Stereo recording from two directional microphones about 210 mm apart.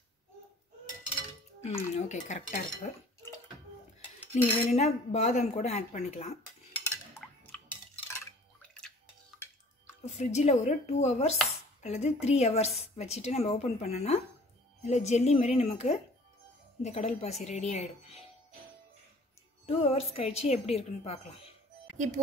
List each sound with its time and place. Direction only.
1.6 s a woman's voice: 30° left (ahead or behind)
4.3 s a woman's voice: 30° left (ahead or behind)
7.2 s a sound: centre (ahead or behind)
10.0 s a woman's voice: 30° left (ahead or behind)
19.6 s a woman's voice: 30° left (ahead or behind)
21.9 s speech: 35° right (ahead or behind)